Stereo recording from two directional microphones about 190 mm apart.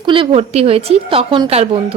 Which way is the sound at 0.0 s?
25° right (ahead or behind).